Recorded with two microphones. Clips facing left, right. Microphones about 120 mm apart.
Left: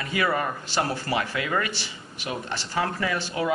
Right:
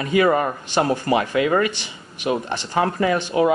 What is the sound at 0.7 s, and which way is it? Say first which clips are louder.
Speech: right 10 dB; 20° right (ahead or behind).